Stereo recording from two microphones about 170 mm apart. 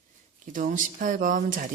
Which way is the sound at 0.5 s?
50° right (ahead or behind).